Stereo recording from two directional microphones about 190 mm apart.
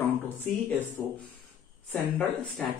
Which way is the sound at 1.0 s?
10° left (ahead or behind).